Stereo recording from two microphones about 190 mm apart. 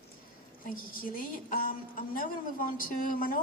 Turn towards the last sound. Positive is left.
turn(degrees=45)  # may be behind; listen again after turning